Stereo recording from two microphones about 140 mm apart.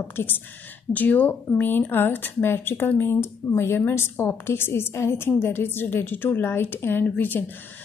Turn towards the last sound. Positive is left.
turn(degrees=15)  # may be behind; listen again after turning